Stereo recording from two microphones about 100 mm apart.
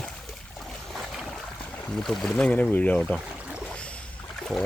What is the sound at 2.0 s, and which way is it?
Speech, 5° left (ahead or behind).